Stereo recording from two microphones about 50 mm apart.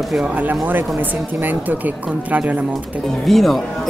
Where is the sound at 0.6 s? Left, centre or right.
Right.